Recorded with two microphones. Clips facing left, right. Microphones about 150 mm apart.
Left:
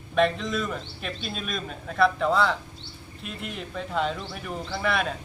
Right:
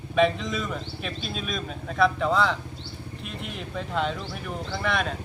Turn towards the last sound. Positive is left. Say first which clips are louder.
# left 1 dB
turn(degrees=0)  # may be behind; listen again after turning